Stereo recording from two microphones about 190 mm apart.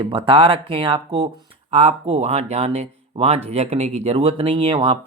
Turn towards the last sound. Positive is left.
turn(degrees=-30)  # may be behind; listen again after turning